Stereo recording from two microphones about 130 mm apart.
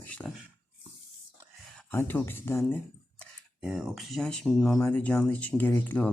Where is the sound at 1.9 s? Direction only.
15° left (ahead or behind).